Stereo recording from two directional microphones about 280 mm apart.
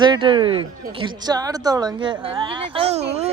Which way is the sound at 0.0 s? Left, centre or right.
Centre.